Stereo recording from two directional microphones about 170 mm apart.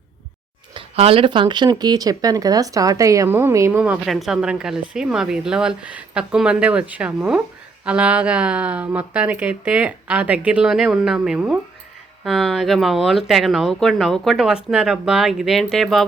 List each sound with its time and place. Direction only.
0.7 s speech: 30° right (ahead or behind); by 16.0 s centre (ahead or behind)